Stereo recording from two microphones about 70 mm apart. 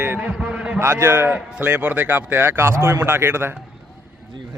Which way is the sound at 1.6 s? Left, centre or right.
Right.